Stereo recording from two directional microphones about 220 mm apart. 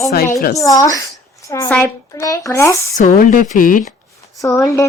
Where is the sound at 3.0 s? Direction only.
35° left (ahead or behind).